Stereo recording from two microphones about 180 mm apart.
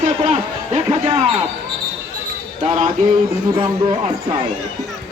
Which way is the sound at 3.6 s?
30° right (ahead or behind).